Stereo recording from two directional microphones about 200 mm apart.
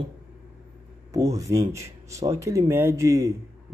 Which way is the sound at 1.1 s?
15° right (ahead or behind).